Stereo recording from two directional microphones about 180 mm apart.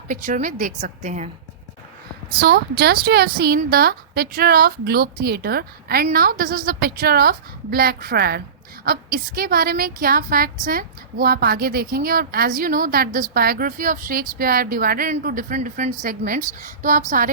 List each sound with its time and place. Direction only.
0.1 s a woman's voice: 45° right (ahead or behind)
2.4 s a woman's voice: 60° right (ahead or behind)